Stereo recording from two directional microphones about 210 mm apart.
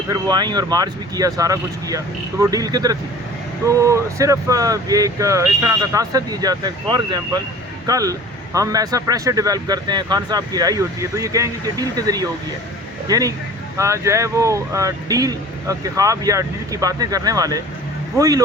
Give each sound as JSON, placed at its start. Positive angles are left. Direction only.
{"t": 0.1, "sound": "speech", "side_deg": -20}